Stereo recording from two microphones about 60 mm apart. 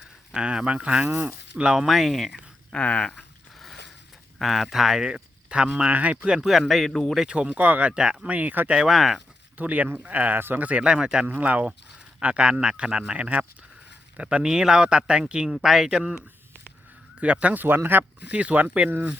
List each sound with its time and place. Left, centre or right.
0.0 s a sound: centre
0.4 s speech: centre
1.0 s speech: right
1.5 s a man's voice: centre
1.9 s a man's voice: centre
2.7 s speech: centre
3.2 s a sound: centre
4.4 s a man's voice: centre
5.1 s speech: centre
6.3 s a man's voice: centre
7.2 s speech: centre
8.8 s a man's voice: centre
9.6 s speech: right
11.3 s a man's voice: right